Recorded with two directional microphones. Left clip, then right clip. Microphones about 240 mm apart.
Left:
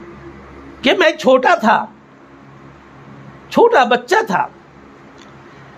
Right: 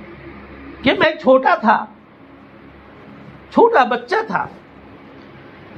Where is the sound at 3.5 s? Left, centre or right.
Left.